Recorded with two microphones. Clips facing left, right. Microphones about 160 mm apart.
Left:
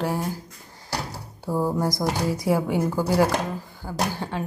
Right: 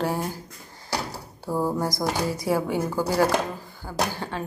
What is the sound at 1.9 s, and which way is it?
Speech, 15° left (ahead or behind).